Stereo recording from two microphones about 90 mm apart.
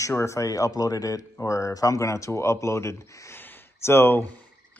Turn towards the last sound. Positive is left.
turn(degrees=25)  # may be behind; listen again after turning